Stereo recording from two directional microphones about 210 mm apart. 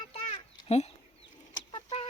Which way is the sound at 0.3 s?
30° left (ahead or behind).